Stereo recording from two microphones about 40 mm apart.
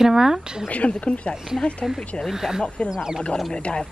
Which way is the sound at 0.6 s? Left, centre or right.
Left.